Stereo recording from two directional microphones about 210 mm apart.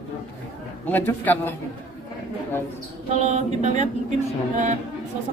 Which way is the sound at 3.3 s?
35° right (ahead or behind).